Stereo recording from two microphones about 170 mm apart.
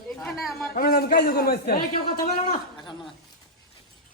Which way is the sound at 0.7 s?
60° left (ahead or behind).